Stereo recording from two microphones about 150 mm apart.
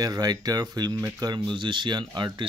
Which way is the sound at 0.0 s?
25° right (ahead or behind).